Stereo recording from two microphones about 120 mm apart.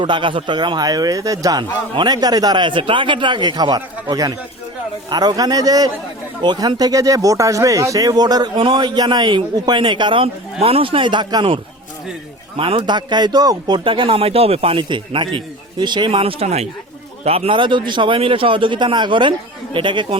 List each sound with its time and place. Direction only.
0.0 s speech: 40° right (ahead or behind)